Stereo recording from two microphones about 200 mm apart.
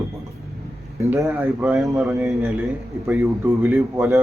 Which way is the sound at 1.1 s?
10° right (ahead or behind).